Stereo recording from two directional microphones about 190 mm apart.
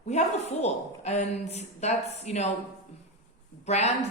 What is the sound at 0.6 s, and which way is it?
Speech, 35° left (ahead or behind).